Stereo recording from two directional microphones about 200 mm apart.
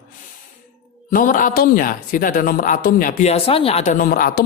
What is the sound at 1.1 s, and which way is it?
Speech, 40° left (ahead or behind).